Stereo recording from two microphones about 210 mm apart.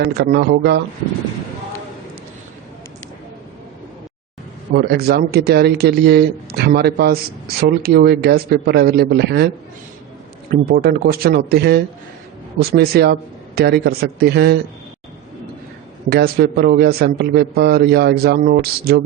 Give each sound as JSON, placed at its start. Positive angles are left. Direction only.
{"t": 0.0, "sound": "a man's voice", "side_deg": -55}
{"t": 4.7, "sound": "a man's voice", "side_deg": -50}
{"t": 10.5, "sound": "a man's voice", "side_deg": -45}
{"t": 16.0, "sound": "a man's voice", "side_deg": -50}